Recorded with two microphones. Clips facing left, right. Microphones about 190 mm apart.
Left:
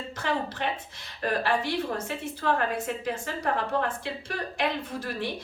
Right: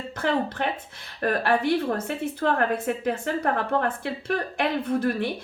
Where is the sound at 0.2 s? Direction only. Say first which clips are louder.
Right 5 dB; 55° right (ahead or behind).